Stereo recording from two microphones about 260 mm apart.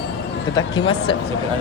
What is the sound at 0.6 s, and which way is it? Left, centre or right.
Speech, centre.